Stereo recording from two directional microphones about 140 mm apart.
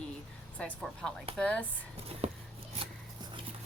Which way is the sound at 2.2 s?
50° right (ahead or behind).